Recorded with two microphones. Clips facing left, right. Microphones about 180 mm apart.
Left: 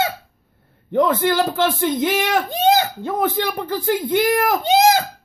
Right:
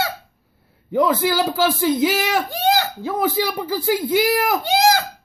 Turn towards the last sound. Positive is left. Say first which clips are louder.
# left 2 dB
turn(degrees=20)  # may be behind; listen again after turning